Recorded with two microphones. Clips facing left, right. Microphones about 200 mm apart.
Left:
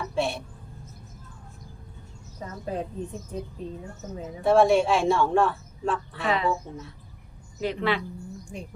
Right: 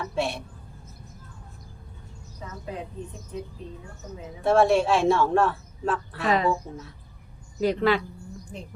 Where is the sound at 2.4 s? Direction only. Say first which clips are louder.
Left 2 dB; 45° left (ahead or behind).